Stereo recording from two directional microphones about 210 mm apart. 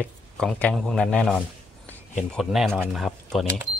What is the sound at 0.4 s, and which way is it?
Speech, 5° left (ahead or behind).